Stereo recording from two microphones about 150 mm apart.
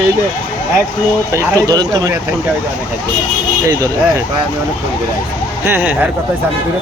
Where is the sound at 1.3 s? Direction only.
20° right (ahead or behind).